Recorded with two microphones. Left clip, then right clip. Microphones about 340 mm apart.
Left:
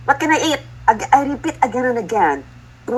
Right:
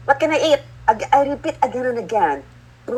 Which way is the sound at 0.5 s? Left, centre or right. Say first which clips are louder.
Even; centre.